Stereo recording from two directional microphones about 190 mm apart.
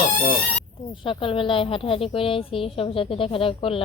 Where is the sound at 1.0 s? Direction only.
25° left (ahead or behind).